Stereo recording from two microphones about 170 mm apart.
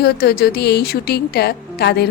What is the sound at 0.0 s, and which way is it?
Speech, 65° left (ahead or behind).